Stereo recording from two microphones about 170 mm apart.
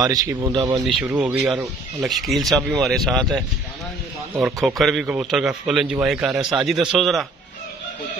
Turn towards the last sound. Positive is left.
turn(degrees=0)  # may be behind; listen again after turning